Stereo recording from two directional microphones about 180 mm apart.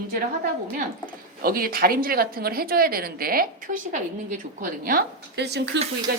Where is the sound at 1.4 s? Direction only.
55° right (ahead or behind).